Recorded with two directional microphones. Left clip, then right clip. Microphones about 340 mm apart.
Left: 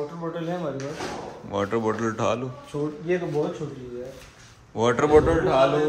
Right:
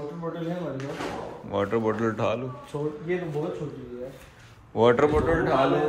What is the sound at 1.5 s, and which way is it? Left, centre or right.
Speech, centre.